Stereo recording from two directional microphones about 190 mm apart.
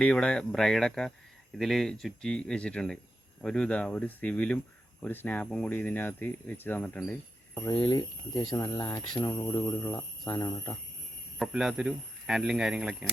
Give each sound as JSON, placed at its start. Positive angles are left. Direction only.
{"t": 0.0, "sound": "speech", "side_deg": 5}
{"t": 11.3, "sound": "speech", "side_deg": 0}